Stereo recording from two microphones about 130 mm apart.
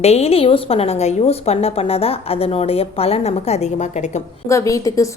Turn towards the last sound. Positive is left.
turn(degrees=25)  # may be behind; listen again after turning